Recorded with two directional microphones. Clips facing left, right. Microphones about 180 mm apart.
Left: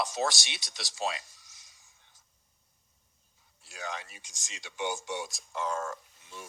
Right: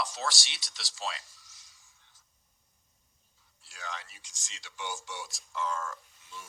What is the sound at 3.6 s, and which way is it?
Speech, 20° left (ahead or behind).